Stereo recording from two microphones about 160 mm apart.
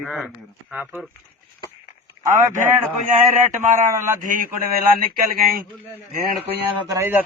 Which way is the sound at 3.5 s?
50° right (ahead or behind).